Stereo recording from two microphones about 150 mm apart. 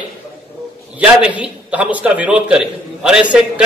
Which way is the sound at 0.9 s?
10° right (ahead or behind).